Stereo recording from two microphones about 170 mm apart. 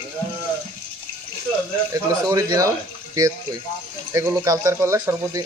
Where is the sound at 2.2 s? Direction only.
20° right (ahead or behind).